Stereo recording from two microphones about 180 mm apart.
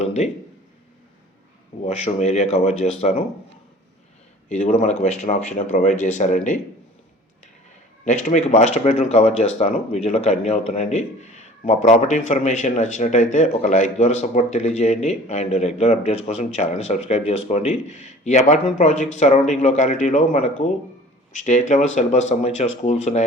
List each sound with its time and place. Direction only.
0.0 s speech: 40° left (ahead or behind)
1.8 s speech: 35° left (ahead or behind)
4.4 s speech: 40° left (ahead or behind)
8.0 s speech: 40° left (ahead or behind)